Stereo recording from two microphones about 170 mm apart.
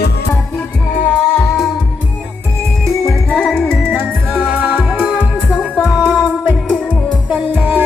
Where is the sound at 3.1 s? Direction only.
5° left (ahead or behind).